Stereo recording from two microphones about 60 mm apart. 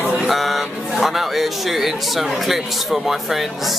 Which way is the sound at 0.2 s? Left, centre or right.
Centre.